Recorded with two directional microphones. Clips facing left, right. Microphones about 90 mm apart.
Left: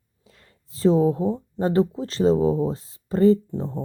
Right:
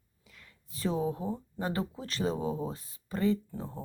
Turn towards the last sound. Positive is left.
turn(degrees=20)  # may be behind; listen again after turning